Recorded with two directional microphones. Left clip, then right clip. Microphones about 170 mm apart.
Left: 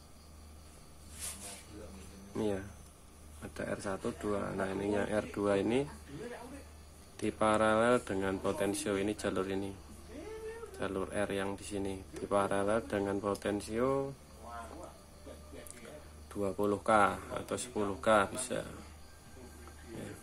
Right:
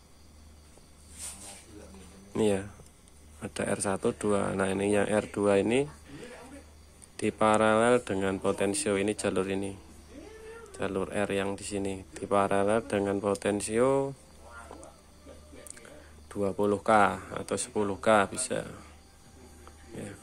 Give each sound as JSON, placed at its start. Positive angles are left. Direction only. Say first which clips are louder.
{"t": 2.3, "sound": "speech", "louder": "right 8 dB", "side_deg": -45}
{"t": 7.2, "sound": "speech", "louder": "right 5 dB", "side_deg": -35}
{"t": 10.8, "sound": "speech", "louder": "right 5 dB", "side_deg": -35}
{"t": 16.3, "sound": "speech", "louder": "right 5 dB", "side_deg": -30}